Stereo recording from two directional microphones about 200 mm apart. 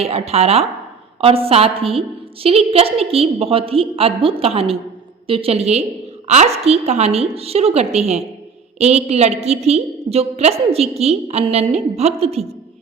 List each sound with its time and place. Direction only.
0.0 s a woman's voice: 30° right (ahead or behind)